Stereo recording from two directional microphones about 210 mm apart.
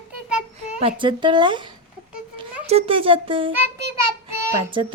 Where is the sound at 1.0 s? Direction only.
25° right (ahead or behind).